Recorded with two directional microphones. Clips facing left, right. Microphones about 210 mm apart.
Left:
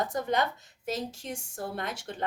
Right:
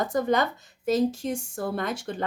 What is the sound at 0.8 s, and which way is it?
Speech, 40° right (ahead or behind).